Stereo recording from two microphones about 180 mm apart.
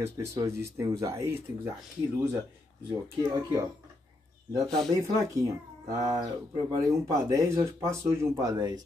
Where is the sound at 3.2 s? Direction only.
20° right (ahead or behind).